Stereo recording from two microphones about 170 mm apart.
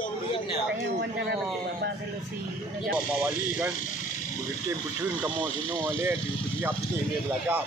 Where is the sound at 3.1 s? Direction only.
5° right (ahead or behind).